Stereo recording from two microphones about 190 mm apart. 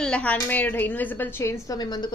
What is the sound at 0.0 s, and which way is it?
A woman's voice, 5° left (ahead or behind).